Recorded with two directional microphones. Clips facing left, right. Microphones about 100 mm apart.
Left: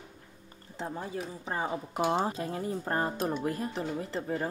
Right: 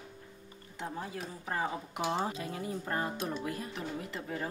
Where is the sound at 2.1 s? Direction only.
35° left (ahead or behind).